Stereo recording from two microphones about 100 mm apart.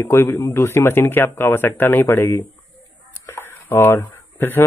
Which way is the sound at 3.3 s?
25° left (ahead or behind).